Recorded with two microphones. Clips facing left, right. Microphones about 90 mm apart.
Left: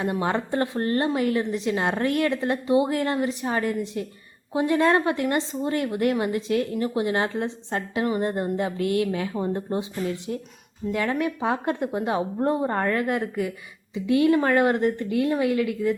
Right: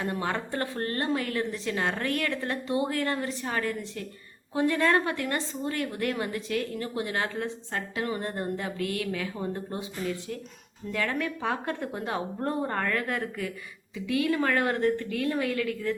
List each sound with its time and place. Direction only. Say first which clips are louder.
0.0 s a woman's voice: left 5 dB; 20° left (ahead or behind)